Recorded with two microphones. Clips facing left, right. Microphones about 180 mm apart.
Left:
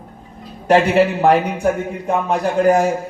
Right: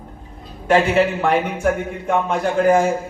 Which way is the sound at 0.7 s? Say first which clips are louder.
Left 2 dB; 40° left (ahead or behind).